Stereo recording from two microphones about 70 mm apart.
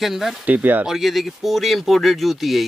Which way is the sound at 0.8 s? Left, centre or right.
Centre.